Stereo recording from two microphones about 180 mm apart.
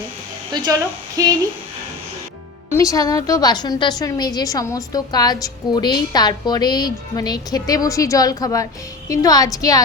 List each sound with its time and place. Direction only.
0.5 s speech: 20° right (ahead or behind)
2.6 s a woman's voice: 15° left (ahead or behind)